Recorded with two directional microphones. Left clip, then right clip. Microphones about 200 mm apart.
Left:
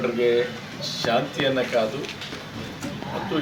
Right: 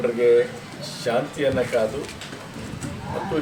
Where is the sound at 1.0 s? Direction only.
10° right (ahead or behind).